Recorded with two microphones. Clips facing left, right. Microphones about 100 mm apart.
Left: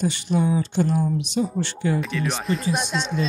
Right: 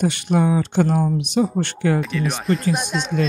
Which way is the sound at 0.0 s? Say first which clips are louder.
Right 3 dB; 70° right (ahead or behind).